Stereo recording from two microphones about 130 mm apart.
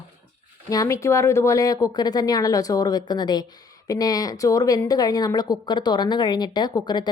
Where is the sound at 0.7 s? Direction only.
25° left (ahead or behind).